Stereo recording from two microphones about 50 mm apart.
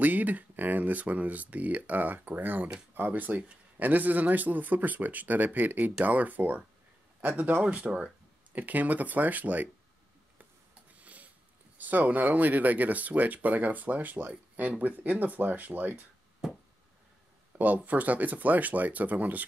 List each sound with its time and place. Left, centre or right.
0.0 s speech: right
7.6 s speech: right
11.0 s a sound: right
11.8 s speech: right
17.6 s speech: right